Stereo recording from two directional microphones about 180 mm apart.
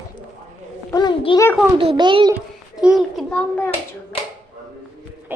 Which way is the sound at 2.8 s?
5° left (ahead or behind).